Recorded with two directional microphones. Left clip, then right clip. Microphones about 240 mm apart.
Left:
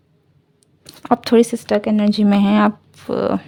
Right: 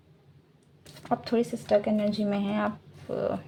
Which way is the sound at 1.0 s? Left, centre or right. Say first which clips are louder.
Left 13 dB; left.